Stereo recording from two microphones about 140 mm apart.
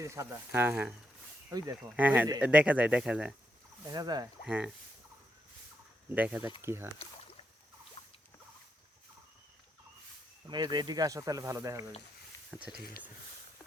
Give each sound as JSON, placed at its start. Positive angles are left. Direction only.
{"t": 0.0, "sound": "speech", "side_deg": -20}
{"t": 2.0, "sound": "speech", "side_deg": -10}
{"t": 3.8, "sound": "speech", "side_deg": -30}
{"t": 4.4, "sound": "speech", "side_deg": -5}
{"t": 6.1, "sound": "speech", "side_deg": -10}
{"t": 8.0, "sound": "rodents", "side_deg": 35}
{"t": 10.4, "sound": "speech", "side_deg": -30}
{"t": 12.5, "sound": "speech", "side_deg": -5}